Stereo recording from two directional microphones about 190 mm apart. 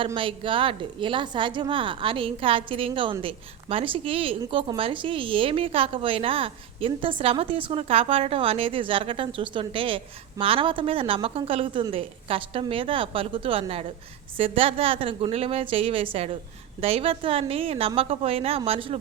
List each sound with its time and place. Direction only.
0.0 s a woman's voice: 25° right (ahead or behind)